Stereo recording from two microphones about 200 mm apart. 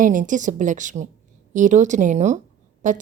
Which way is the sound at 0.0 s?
40° right (ahead or behind).